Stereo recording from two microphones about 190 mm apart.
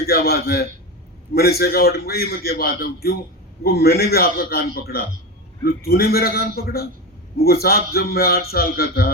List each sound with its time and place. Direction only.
0.0 s a man's voice: 55° left (ahead or behind)